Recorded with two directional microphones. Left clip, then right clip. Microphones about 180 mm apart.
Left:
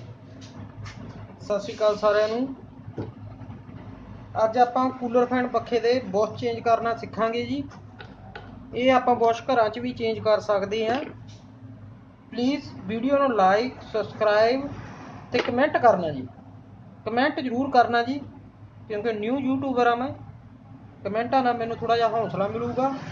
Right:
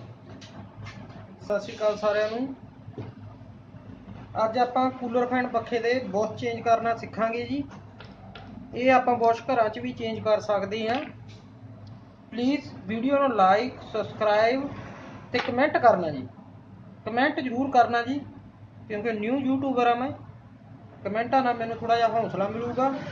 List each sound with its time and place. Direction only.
1.8 s speech: 25° left (ahead or behind)
4.4 s a man's voice: 15° left (ahead or behind)
8.7 s speech: 15° left (ahead or behind)
12.3 s a man's voice: 15° left (ahead or behind)
17.0 s speech: 20° left (ahead or behind)
18.9 s a man's voice: 10° left (ahead or behind)